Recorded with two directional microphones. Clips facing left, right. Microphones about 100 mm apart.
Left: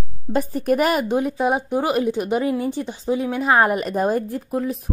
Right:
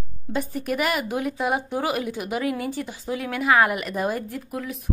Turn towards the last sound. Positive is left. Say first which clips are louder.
# left 7 dB
turn(degrees=35)  # may be behind; listen again after turning